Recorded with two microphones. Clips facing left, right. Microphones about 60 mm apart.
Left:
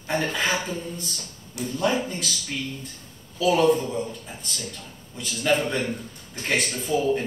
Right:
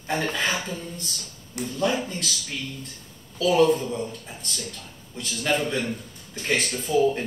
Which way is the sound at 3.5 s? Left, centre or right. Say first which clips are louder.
Right 1 dB; centre.